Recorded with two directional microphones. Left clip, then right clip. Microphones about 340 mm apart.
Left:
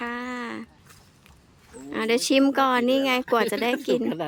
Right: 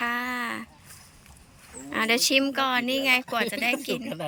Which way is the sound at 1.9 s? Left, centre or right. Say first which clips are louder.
Even; centre.